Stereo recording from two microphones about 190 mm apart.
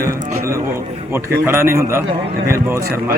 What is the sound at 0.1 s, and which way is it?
Speech, 50° right (ahead or behind).